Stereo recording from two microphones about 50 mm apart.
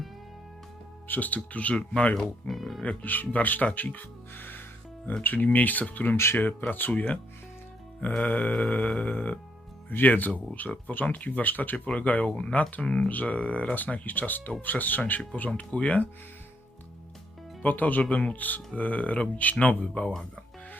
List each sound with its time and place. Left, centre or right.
1.0 s speech: left
1.7 s speech: left
2.5 s speech: centre
3.0 s speech: left
8.2 s speech: left
15.4 s speech: left
17.6 s speech: left
18.1 s speech: left
18.3 s speech: left